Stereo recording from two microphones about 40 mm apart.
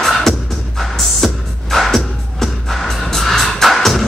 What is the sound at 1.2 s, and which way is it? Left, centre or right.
Music, centre.